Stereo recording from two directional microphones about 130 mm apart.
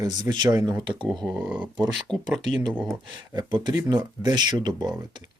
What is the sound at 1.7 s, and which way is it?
Speech, 35° right (ahead or behind).